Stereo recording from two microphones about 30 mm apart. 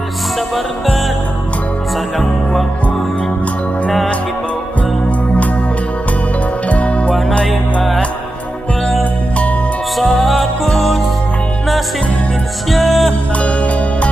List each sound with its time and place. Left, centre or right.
6.7 s music: left
10.0 s music: centre
12.7 s music: centre
13.4 s music: left